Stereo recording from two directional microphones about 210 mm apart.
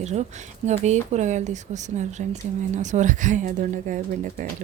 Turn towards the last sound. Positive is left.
turn(degrees=-40)  # may be behind; listen again after turning